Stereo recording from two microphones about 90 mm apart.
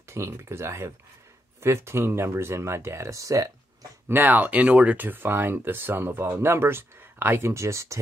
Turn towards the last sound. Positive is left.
turn(degrees=-35)  # may be behind; listen again after turning